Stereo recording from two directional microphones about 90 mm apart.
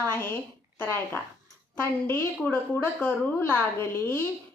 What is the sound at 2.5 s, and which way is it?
A woman's voice, 20° left (ahead or behind).